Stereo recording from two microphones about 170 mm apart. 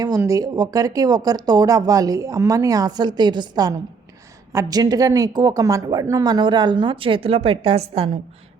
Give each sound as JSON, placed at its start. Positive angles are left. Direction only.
{"t": 0.0, "sound": "speech", "side_deg": -20}